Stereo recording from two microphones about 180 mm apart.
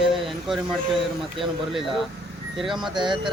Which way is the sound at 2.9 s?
25° right (ahead or behind).